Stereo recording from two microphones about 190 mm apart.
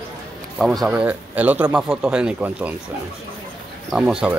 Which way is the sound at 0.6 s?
Centre (ahead or behind).